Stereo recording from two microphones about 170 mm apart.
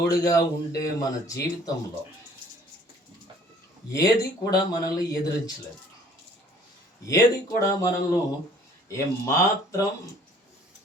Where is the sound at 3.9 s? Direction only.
20° left (ahead or behind).